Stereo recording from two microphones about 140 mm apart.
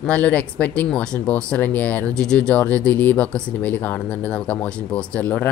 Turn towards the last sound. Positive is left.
turn(degrees=10)  # may be behind; listen again after turning